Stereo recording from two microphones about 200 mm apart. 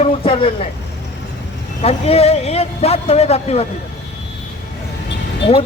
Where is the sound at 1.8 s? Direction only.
30° left (ahead or behind).